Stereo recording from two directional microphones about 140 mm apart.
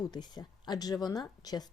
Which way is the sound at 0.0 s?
30° left (ahead or behind).